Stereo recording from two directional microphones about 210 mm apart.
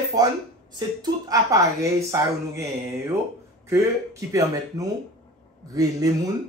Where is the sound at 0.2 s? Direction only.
20° right (ahead or behind).